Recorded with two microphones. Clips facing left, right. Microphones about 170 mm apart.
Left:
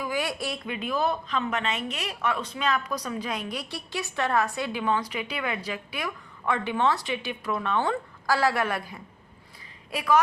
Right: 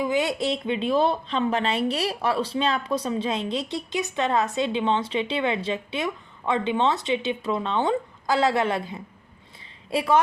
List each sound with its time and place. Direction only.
0.0 s speech: 20° right (ahead or behind)